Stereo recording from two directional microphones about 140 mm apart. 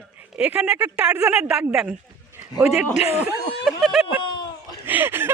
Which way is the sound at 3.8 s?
Centre (ahead or behind).